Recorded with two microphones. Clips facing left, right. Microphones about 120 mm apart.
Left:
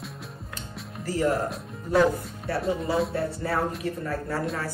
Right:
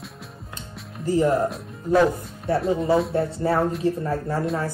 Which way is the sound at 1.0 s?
20° right (ahead or behind).